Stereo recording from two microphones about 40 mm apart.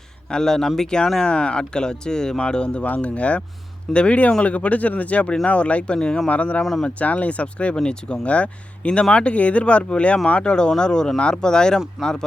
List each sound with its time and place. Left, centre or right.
0.3 s a man's voice: centre
2.8 s speech: left
6.0 s a man's voice: centre
6.2 s speech: left
10.4 s speech: centre
12.0 s speech: centre